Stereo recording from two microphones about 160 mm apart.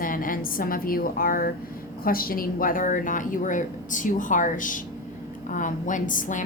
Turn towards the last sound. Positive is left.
turn(degrees=55)  # may be behind; listen again after turning